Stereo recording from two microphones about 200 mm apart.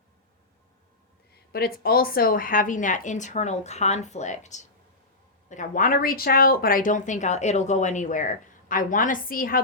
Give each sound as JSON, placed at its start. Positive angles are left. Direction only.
{"t": 1.3, "sound": "speech", "side_deg": 50}